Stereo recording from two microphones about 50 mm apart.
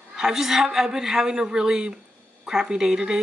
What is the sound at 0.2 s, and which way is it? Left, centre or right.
Speech, centre.